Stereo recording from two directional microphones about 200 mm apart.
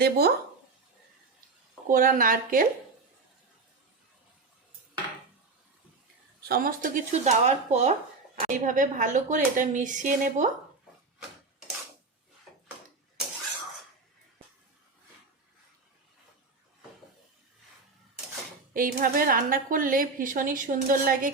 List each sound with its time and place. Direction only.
0.0 s a woman's voice: 50° right (ahead or behind)
1.9 s a woman's voice: 45° right (ahead or behind)
6.5 s speech: 45° right (ahead or behind)
18.7 s a woman's voice: 45° right (ahead or behind)